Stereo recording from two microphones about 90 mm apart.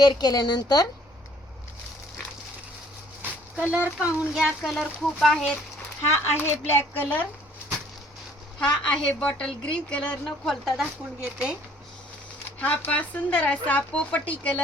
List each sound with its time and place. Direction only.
0.0 s speech: 50° left (ahead or behind)
3.6 s speech: 15° right (ahead or behind)
4.4 s speech: centre (ahead or behind)
6.3 s speech: 25° left (ahead or behind)
8.7 s speech: 10° left (ahead or behind)
10.5 s speech: centre (ahead or behind)
11.2 s speech: 15° right (ahead or behind)
12.5 s speech: 15° left (ahead or behind)